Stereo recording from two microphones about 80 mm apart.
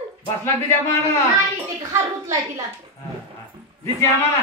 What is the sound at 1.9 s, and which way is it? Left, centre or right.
Speech, right.